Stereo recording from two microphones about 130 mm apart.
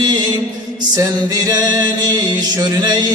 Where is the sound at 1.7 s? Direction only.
30° right (ahead or behind).